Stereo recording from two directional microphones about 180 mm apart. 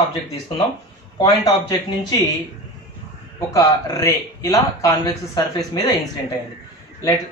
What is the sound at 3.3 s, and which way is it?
A man's voice, 20° left (ahead or behind).